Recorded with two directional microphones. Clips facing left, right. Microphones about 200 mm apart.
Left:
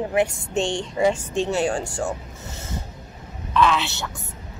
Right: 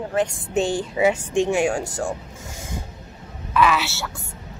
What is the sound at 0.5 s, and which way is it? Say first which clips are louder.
A woman's voice: right 2 dB; 5° right (ahead or behind).